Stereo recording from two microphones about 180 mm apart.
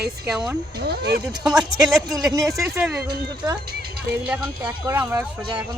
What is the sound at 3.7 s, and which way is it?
Speech, 60° right (ahead or behind).